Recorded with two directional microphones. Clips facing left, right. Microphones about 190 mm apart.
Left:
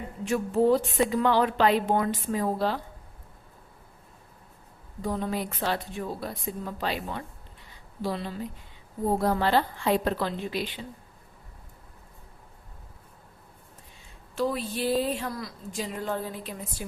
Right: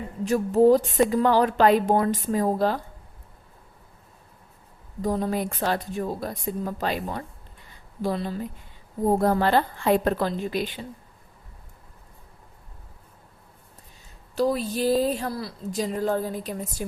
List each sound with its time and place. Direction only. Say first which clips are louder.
0.3 s a woman's voice: right 5 dB; 40° right (ahead or behind)
5.0 s a woman's voice: right 4 dB; 40° right (ahead or behind)
14.3 s a woman's voice: right 5 dB; 40° right (ahead or behind)